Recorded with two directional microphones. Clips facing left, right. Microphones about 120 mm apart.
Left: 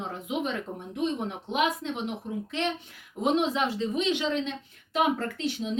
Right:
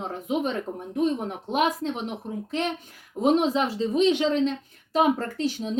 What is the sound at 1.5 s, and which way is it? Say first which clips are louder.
Speech: right 3 dB; 40° right (ahead or behind).